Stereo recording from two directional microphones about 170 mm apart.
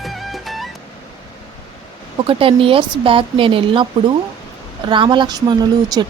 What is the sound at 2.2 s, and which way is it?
A woman's voice, 30° right (ahead or behind).